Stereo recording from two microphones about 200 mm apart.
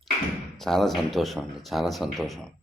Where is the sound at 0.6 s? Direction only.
Centre (ahead or behind).